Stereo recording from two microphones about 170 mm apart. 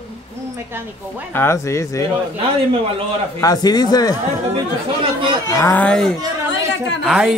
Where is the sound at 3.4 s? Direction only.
20° left (ahead or behind).